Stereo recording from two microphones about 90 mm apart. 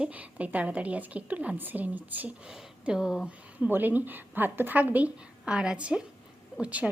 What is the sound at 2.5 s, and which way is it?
Speech, 5° right (ahead or behind).